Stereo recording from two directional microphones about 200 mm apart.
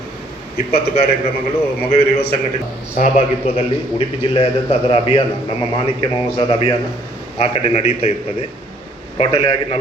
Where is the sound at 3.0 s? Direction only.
30° left (ahead or behind).